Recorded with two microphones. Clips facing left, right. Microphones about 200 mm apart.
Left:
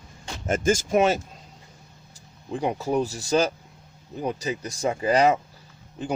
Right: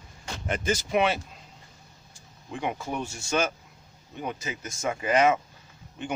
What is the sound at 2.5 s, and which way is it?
Speech, 35° left (ahead or behind).